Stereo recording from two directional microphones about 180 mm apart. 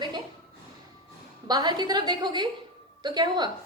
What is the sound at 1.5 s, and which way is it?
A woman's voice, 25° right (ahead or behind).